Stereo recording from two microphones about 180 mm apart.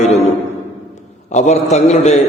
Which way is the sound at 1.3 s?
40° left (ahead or behind).